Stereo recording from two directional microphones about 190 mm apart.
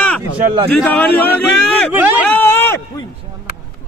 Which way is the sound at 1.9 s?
10° right (ahead or behind).